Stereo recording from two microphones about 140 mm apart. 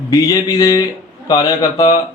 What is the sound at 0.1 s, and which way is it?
A man's voice, 25° left (ahead or behind).